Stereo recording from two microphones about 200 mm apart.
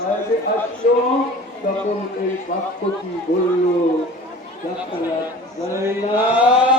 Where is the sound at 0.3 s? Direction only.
45° left (ahead or behind).